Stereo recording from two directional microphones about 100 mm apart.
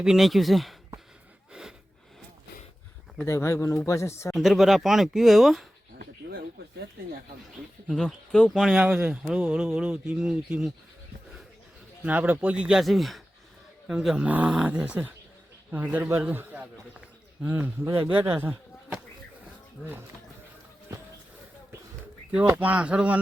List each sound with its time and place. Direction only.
0.0 s speech: 5° right (ahead or behind)
3.2 s speech: 30° left (ahead or behind)
4.4 s speech: centre (ahead or behind)
7.9 s speech: 5° left (ahead or behind)
8.5 s speech: centre (ahead or behind)
8.8 s speech: 15° right (ahead or behind)
12.0 s speech: 15° right (ahead or behind)
22.4 s speech: 15° right (ahead or behind)